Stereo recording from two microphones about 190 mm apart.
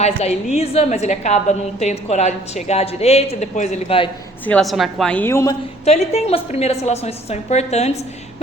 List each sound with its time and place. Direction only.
0.0 s a woman's voice: 35° left (ahead or behind)
4.4 s a woman's voice: 5° left (ahead or behind)
5.8 s a woman's voice: 35° left (ahead or behind)